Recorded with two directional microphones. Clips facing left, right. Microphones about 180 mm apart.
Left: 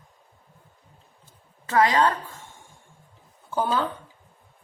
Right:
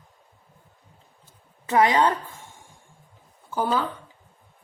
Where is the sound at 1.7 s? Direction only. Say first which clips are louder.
Right 1 dB; 20° right (ahead or behind).